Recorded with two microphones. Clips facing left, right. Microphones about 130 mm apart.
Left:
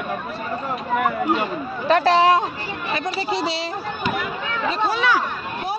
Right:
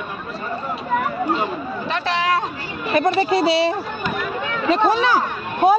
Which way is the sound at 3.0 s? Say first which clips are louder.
Right 11 dB; 60° right (ahead or behind).